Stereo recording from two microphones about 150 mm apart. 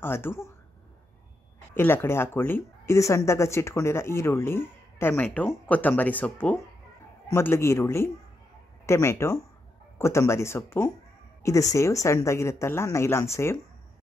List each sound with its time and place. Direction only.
0.0 s speech: 15° left (ahead or behind)
1.7 s speech: 15° left (ahead or behind)